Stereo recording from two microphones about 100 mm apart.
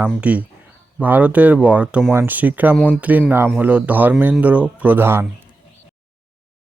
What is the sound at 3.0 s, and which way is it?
Speech, 15° right (ahead or behind).